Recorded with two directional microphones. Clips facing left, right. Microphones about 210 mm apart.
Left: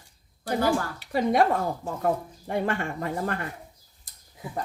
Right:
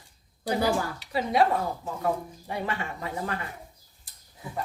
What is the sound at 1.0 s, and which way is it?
Speech, 50° left (ahead or behind).